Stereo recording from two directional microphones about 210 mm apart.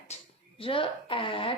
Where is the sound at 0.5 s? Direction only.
25° left (ahead or behind).